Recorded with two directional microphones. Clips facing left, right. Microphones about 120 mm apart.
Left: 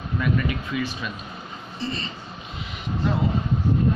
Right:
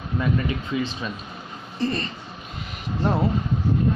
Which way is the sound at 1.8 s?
50° right (ahead or behind).